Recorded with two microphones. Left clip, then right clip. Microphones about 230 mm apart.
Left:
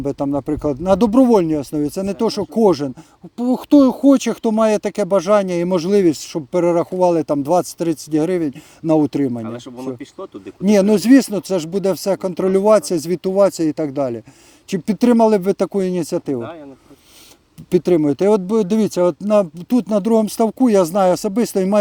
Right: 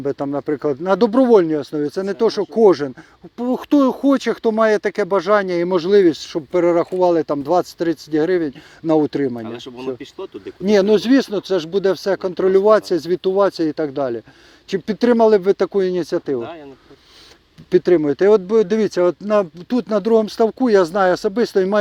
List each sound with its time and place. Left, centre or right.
0.0 s speech: left
9.4 s speech: centre
10.7 s speech: left
17.7 s speech: left